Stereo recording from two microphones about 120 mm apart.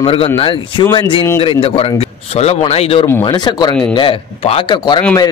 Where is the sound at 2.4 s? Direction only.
60° left (ahead or behind).